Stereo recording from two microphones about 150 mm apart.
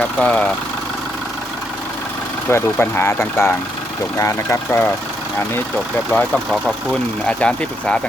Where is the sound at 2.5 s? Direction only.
15° left (ahead or behind).